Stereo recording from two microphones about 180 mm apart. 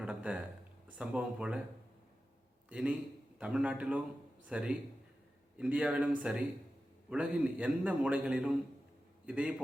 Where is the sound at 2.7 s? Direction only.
5° right (ahead or behind).